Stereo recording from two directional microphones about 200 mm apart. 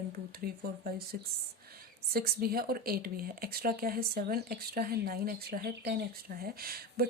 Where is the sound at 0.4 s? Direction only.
50° right (ahead or behind).